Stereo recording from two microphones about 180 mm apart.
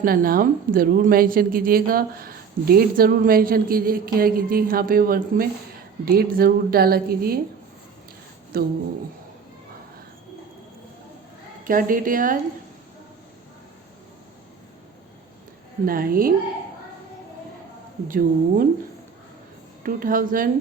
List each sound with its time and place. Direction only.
0.0 s a woman's voice: 55° right (ahead or behind)
8.5 s a woman's voice: 55° right (ahead or behind)
11.6 s a woman's voice: 50° right (ahead or behind)
15.9 s a woman's voice: 55° right (ahead or behind)
18.1 s a woman's voice: 50° right (ahead or behind)
19.8 s a woman's voice: 55° right (ahead or behind)